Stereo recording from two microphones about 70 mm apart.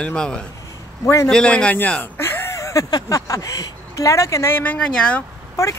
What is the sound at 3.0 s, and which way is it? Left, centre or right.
Speech, left.